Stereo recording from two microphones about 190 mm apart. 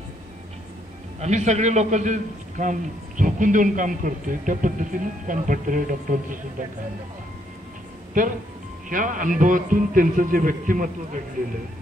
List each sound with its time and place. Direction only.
1.2 s a man's voice: 35° right (ahead or behind)
8.2 s a man's voice: 45° right (ahead or behind)